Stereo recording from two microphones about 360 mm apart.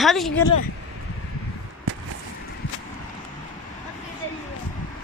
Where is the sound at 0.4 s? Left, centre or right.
Left.